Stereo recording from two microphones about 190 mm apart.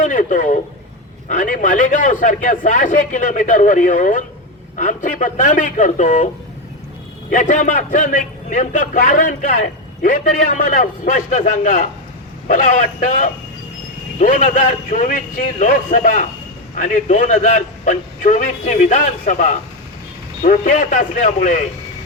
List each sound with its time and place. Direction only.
0.0 s a man's voice: 45° left (ahead or behind)
7.3 s a man's voice: 40° left (ahead or behind)